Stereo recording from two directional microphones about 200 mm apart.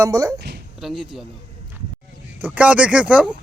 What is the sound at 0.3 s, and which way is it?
Speech, 55° right (ahead or behind).